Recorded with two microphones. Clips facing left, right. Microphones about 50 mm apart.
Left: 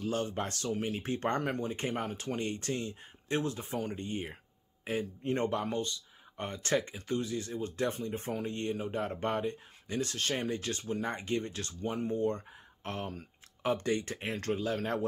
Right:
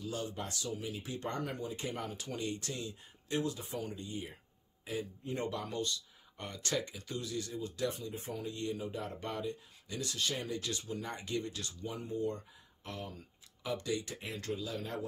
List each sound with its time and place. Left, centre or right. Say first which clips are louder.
0.0 s speech: left 6 dB; left
5.4 s speech: left 5 dB; left
5.8 s speech: left 2 dB; left